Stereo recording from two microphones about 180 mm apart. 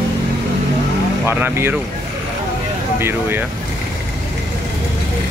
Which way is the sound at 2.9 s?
10° right (ahead or behind).